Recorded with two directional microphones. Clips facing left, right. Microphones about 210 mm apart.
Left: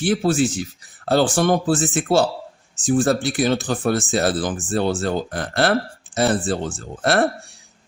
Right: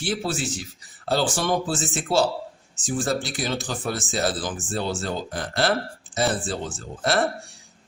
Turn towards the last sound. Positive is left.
turn(degrees=55)  # may be behind; listen again after turning